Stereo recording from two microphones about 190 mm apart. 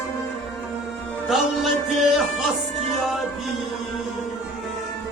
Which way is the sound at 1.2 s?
Centre (ahead or behind).